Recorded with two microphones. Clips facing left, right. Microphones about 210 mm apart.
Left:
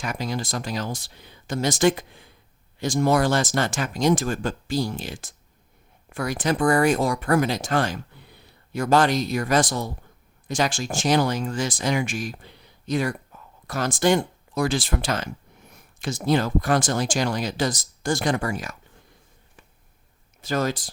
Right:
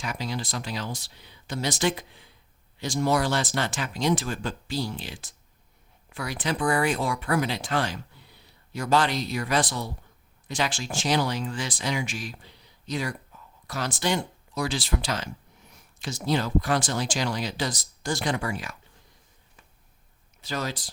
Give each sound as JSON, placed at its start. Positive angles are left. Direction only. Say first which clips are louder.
{"t": 0.0, "sound": "speech", "louder": "left 4 dB", "side_deg": 50}
{"t": 20.4, "sound": "speech", "louder": "left 7 dB", "side_deg": 50}